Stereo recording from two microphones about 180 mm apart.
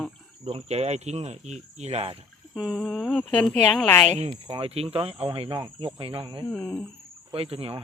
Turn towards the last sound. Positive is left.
turn(degrees=-30)  # may be behind; listen again after turning